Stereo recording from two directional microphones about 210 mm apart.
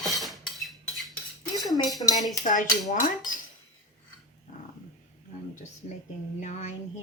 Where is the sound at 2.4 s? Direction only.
35° left (ahead or behind).